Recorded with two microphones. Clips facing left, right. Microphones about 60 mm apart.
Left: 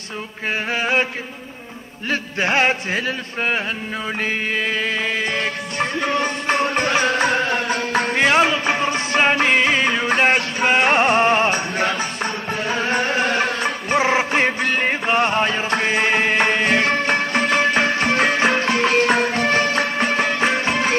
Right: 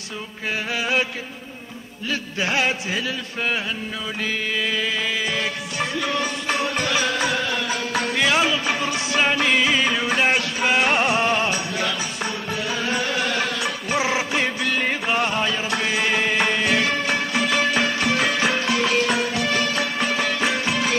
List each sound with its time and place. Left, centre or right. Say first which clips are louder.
0.7 s chant: left 3 dB; left
2.0 s chant: left 4 dB; left
4.6 s music: left 2 dB; left